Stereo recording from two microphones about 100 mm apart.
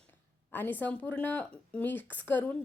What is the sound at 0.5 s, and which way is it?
A woman's voice, 20° left (ahead or behind).